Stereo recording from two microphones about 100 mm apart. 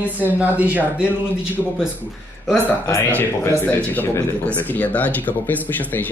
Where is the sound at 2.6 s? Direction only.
25° left (ahead or behind).